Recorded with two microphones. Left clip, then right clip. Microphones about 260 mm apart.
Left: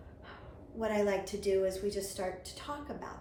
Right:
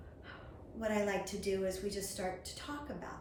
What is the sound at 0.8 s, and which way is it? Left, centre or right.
A woman's voice, centre.